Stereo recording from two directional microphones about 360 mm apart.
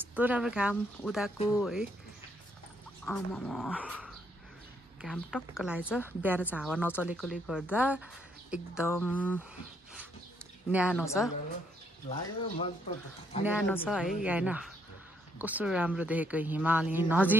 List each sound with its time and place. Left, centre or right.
0.0 s a woman's voice: centre
3.1 s a woman's voice: centre
10.7 s a woman's voice: centre
12.1 s speech: centre
13.5 s a woman's voice: centre